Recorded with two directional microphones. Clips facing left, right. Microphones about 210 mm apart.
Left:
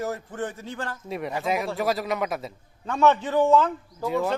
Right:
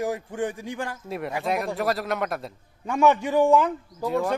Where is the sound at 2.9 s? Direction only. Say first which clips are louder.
Right 1 dB; 10° right (ahead or behind).